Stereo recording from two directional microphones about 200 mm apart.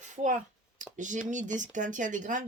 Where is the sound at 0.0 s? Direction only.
35° right (ahead or behind).